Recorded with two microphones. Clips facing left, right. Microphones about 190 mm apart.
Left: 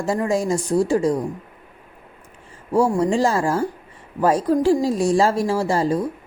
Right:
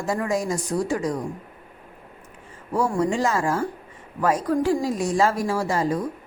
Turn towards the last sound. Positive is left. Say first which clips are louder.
# left 3 dB
turn(degrees=30)  # may be behind; listen again after turning